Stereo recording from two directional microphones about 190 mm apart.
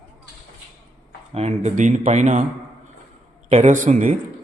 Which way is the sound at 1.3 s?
35° right (ahead or behind).